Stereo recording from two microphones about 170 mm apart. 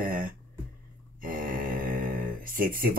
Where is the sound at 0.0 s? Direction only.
55° right (ahead or behind).